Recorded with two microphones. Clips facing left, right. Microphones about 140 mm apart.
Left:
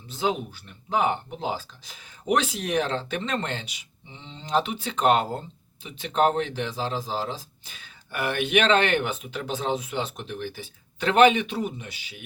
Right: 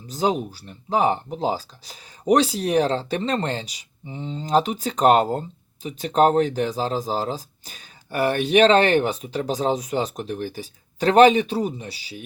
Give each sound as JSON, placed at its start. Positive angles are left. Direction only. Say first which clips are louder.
{"t": 0.1, "sound": "speech", "louder": "right 4 dB", "side_deg": -40}